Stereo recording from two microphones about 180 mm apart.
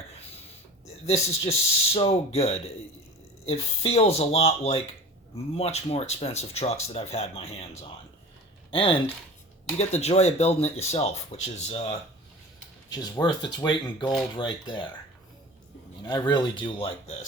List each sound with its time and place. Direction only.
1.0 s speech: 35° left (ahead or behind)
12.9 s speech: 25° left (ahead or behind)
16.0 s speech: 25° left (ahead or behind)